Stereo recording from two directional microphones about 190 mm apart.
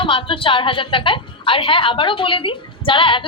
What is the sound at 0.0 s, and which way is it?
A woman's voice, 25° left (ahead or behind).